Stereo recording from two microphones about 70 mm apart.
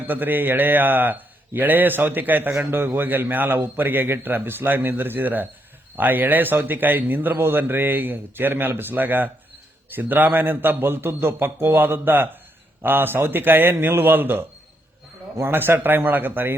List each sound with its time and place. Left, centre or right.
0.1 s a man's voice: right